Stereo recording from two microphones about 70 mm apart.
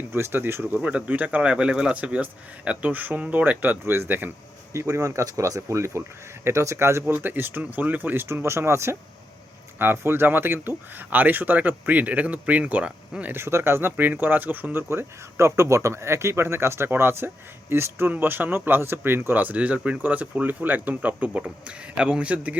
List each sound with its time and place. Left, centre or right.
0.1 s speech: right
0.8 s speech: centre
4.7 s speech: right
7.1 s speech: right
13.3 s speech: right; by 22.5 s centre